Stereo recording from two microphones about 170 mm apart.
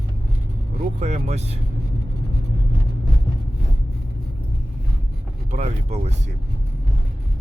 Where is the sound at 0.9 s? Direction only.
40° right (ahead or behind).